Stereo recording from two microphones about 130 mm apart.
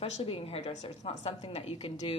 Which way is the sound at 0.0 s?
45° left (ahead or behind).